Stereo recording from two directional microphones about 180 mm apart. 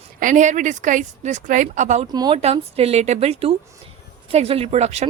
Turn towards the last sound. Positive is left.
turn(degrees=-35)  # may be behind; listen again after turning